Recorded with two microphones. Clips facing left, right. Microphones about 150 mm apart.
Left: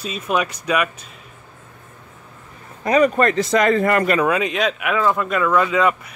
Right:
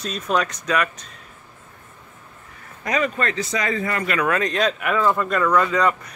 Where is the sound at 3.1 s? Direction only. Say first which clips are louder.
Left 8 dB; 50° left (ahead or behind).